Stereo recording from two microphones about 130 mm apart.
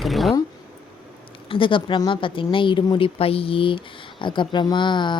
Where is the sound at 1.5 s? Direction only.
40° left (ahead or behind).